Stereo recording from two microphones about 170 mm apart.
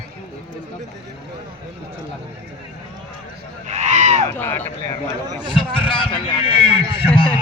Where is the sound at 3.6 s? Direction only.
45° right (ahead or behind).